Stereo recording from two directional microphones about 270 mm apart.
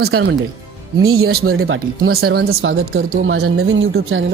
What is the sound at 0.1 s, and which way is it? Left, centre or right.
Speech, right.